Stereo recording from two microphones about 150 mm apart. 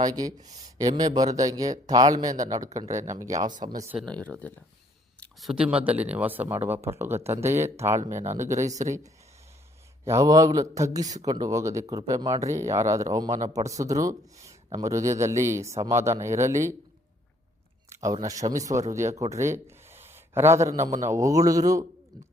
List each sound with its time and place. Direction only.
0.0 s speech: 25° right (ahead or behind)
3.6 s speech: 60° right (ahead or behind)
3.9 s speech: 5° left (ahead or behind)
5.2 s speech: centre (ahead or behind); by 8.6 s 20° right (ahead or behind)
10.0 s speech: 20° right (ahead or behind)
17.8 s a sound: 20° right (ahead or behind)
18.3 s a man's voice: 25° right (ahead or behind)